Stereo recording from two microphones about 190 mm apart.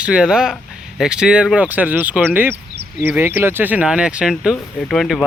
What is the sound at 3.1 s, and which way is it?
Speech, 10° right (ahead or behind).